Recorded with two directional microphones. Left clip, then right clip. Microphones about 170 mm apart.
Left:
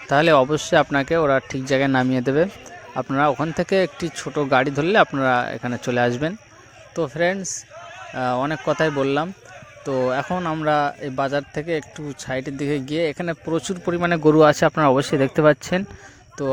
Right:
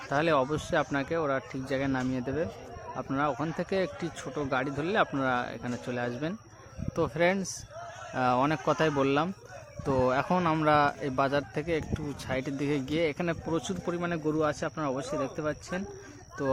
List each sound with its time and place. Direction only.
0.1 s speech: 35° left (ahead or behind)
2.9 s speech: 40° left (ahead or behind)
6.9 s a man's voice: 20° left (ahead or behind); by 15.8 s 50° left (ahead or behind)
16.4 s a man's voice: 30° left (ahead or behind)